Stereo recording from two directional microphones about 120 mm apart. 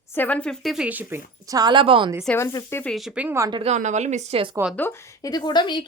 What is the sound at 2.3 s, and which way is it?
Speech, 25° left (ahead or behind).